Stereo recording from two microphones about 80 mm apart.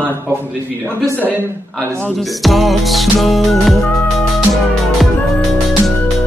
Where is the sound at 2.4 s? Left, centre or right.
Centre.